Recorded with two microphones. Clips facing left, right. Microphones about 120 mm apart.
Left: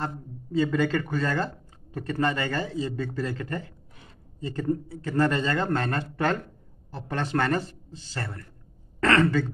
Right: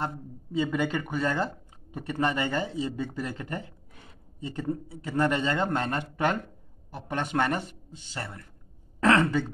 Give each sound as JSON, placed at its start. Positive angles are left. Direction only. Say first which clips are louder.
{"t": 0.0, "sound": "speech", "louder": "even", "side_deg": -15}
{"t": 4.6, "sound": "speech", "louder": "left 6 dB", "side_deg": -15}